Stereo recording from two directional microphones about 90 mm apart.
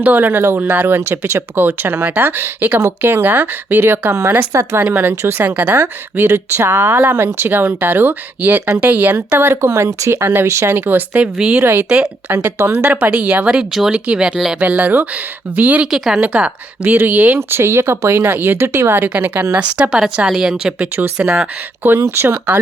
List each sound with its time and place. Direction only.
0.0 s speech: 20° right (ahead or behind)
9.5 s speech: 30° right (ahead or behind); by 11.6 s 10° right (ahead or behind)
11.6 s speech: 25° right (ahead or behind)
15.9 s speech: 5° right (ahead or behind)
20.7 s speech: 20° right (ahead or behind)
21.2 s speech: 10° right (ahead or behind)
22.1 s speech: 25° right (ahead or behind)